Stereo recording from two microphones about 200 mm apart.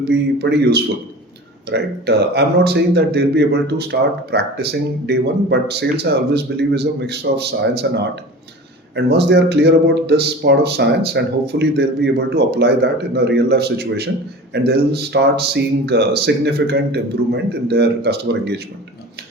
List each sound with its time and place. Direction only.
0.0 s speech: 55° right (ahead or behind)